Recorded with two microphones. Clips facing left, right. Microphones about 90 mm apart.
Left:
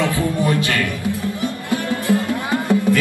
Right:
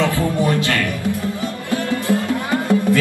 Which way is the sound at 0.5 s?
20° left (ahead or behind).